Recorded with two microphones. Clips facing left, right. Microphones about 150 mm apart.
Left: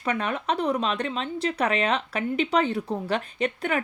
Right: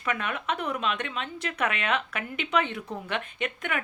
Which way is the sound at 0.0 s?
35° left (ahead or behind).